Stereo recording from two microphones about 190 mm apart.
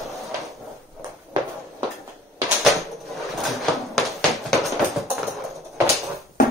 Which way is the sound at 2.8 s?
Centre (ahead or behind).